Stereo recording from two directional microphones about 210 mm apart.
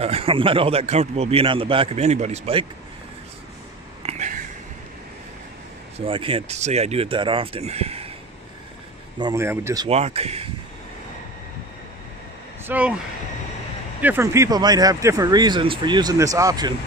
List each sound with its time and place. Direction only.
0.0 s a man's voice: 25° right (ahead or behind)
4.0 s a sound: 30° right (ahead or behind)
5.9 s a man's voice: 25° right (ahead or behind)
9.2 s speech: 15° right (ahead or behind)
9.8 s a man's voice: 30° right (ahead or behind)
12.6 s speech: 5° right (ahead or behind)
14.0 s speech: 10° right (ahead or behind)